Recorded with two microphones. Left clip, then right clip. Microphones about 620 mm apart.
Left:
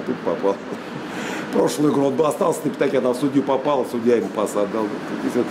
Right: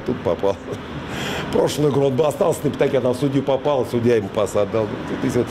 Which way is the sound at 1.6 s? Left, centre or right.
Right.